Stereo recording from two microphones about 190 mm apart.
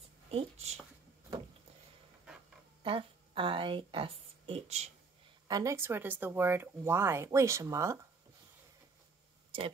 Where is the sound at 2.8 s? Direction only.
25° right (ahead or behind).